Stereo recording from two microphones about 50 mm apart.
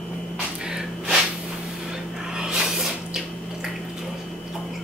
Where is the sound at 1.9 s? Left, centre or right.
Centre.